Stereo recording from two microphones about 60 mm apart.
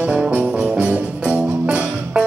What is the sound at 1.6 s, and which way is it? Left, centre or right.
Music, centre.